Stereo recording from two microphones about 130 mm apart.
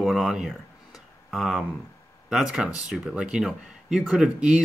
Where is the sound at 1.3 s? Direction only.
Centre (ahead or behind).